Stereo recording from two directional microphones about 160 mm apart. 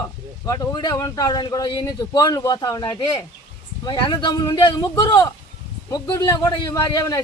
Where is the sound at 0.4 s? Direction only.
20° left (ahead or behind).